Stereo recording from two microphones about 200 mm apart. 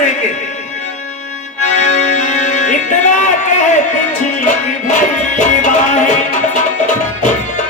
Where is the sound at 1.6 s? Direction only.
35° left (ahead or behind).